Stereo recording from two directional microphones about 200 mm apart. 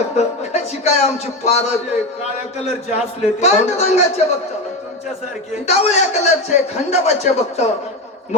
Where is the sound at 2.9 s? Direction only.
35° left (ahead or behind).